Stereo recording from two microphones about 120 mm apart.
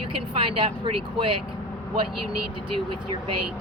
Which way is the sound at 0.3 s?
45° right (ahead or behind).